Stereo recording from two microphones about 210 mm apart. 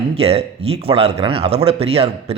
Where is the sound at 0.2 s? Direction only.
30° right (ahead or behind).